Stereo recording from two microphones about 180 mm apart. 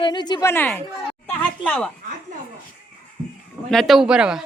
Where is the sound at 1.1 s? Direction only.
5° left (ahead or behind).